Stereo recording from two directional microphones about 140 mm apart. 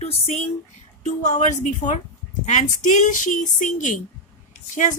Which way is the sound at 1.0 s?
60° left (ahead or behind).